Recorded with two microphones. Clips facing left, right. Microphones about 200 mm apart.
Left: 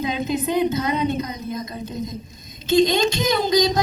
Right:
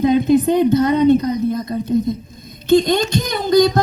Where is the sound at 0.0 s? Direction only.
55° right (ahead or behind).